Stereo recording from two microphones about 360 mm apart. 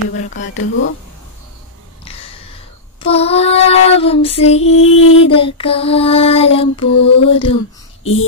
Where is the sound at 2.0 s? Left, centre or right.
Centre.